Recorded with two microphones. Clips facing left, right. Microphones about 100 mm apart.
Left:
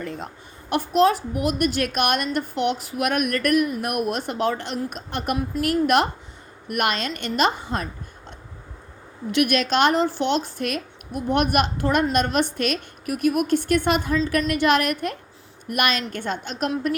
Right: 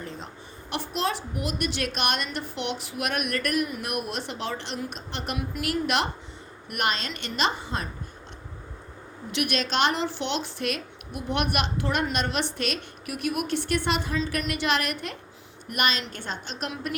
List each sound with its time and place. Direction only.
0.7 s a woman's voice: 50° left (ahead or behind)
9.3 s a woman's voice: 55° left (ahead or behind)